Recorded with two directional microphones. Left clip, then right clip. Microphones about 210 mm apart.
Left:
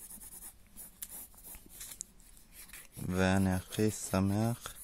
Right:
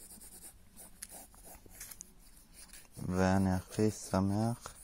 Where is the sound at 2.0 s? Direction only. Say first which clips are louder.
Left 5 dB; 10° left (ahead or behind).